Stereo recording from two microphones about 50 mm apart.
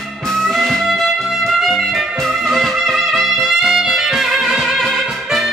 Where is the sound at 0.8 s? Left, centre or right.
Centre.